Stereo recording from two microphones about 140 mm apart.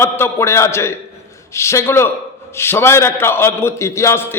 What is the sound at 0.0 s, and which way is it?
A man's voice, 20° left (ahead or behind).